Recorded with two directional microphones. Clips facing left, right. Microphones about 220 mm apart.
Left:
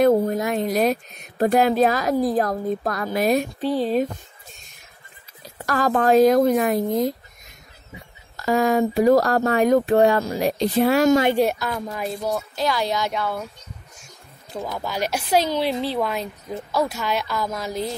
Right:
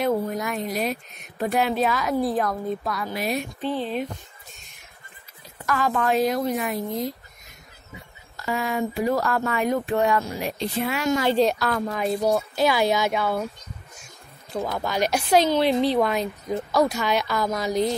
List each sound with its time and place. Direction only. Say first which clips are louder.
0.0 s speech: left 7 dB; 40° left (ahead or behind)
0.4 s a sound: left 5 dB; 25° left (ahead or behind)
0.7 s a woman's voice: left 6 dB; 40° left (ahead or behind)
5.7 s a woman's voice: left 5 dB; 40° left (ahead or behind)
8.5 s a woman's voice: left 7 dB; 40° left (ahead or behind)
11.1 s a woman's voice: left 2 dB; 15° left (ahead or behind)
12.5 s a woman's voice: right 3 dB; 5° right (ahead or behind)
14.7 s a woman's voice: right 1 dB; 5° left (ahead or behind)